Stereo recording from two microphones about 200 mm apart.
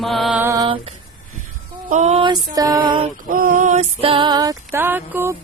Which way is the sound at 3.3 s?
45° right (ahead or behind).